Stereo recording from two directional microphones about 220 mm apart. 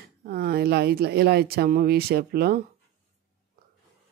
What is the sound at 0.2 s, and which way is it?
Speech, 45° right (ahead or behind).